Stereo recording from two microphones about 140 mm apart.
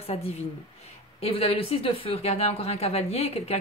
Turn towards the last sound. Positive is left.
turn(degrees=45)  # may be behind; listen again after turning